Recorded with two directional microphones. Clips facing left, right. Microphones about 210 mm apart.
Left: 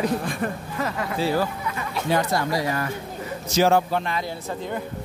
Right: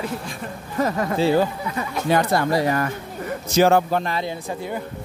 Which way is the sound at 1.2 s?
25° right (ahead or behind).